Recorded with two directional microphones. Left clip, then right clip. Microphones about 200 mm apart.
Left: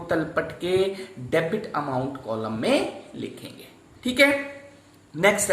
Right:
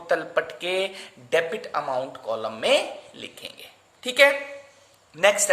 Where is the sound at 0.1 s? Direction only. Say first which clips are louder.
Right 1 dB; 45° right (ahead or behind).